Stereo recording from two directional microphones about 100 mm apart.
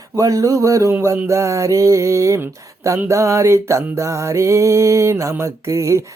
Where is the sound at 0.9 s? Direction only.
25° right (ahead or behind).